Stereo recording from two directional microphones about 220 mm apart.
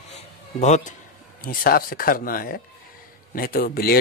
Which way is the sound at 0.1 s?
30° left (ahead or behind).